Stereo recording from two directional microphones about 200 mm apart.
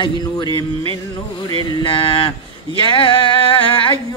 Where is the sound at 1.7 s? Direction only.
25° left (ahead or behind).